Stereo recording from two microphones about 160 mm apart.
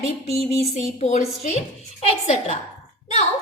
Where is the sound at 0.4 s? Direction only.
45° left (ahead or behind).